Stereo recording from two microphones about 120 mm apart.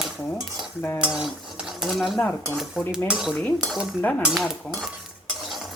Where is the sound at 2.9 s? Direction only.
5° right (ahead or behind).